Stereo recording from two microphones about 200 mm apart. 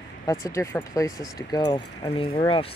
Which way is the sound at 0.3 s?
15° left (ahead or behind).